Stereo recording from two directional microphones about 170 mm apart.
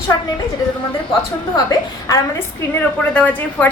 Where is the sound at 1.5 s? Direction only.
20° left (ahead or behind).